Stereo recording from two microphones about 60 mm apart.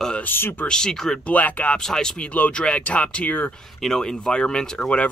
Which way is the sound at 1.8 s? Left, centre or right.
Centre.